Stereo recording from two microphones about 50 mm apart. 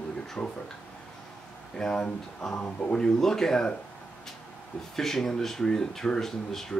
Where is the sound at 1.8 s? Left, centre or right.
Centre.